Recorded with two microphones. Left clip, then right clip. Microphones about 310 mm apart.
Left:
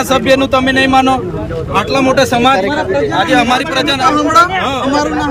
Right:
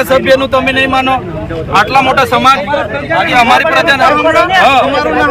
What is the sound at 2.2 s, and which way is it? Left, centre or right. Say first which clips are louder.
Speech: right 2 dB; left.